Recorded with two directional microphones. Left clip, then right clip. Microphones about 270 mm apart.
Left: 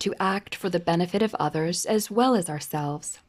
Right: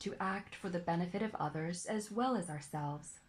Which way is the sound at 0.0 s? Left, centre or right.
Left.